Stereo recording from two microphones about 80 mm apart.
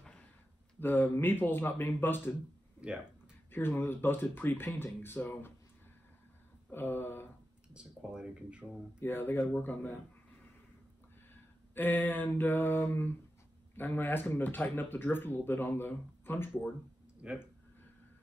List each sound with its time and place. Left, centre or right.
0.7 s speech: left
2.8 s speech: centre
3.5 s speech: left
6.7 s speech: left
7.7 s speech: centre
9.0 s speech: left
11.7 s speech: left
17.2 s speech: centre